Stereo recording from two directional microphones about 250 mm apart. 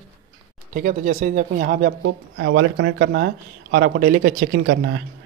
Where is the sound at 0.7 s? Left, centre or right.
Right.